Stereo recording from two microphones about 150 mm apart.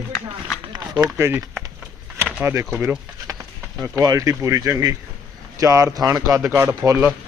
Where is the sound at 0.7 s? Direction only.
25° right (ahead or behind).